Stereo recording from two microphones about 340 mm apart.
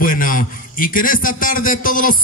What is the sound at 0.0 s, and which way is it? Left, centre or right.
A man's voice, left.